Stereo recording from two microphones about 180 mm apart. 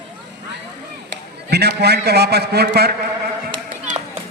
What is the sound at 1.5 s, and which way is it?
A man's voice, 65° right (ahead or behind).